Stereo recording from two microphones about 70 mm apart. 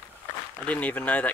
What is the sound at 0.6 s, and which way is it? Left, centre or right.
Speech, centre.